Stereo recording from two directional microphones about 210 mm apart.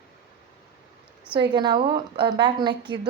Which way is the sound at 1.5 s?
20° right (ahead or behind).